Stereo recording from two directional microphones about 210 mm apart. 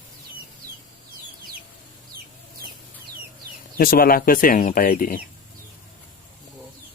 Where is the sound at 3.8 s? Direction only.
45° left (ahead or behind).